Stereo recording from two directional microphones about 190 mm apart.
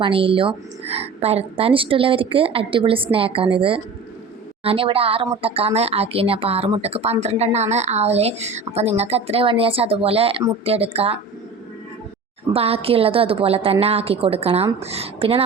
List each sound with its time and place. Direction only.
0.0 s a woman's voice: 30° right (ahead or behind)
12.5 s speech: 30° right (ahead or behind)